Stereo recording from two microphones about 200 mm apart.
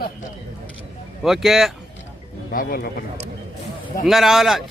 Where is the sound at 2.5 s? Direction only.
45° left (ahead or behind).